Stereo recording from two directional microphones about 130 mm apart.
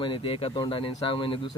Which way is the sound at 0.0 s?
40° left (ahead or behind).